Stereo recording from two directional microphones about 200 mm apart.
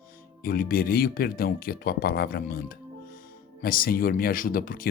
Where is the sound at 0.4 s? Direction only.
45° left (ahead or behind).